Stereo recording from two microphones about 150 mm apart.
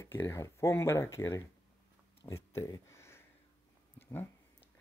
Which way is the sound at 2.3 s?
20° left (ahead or behind).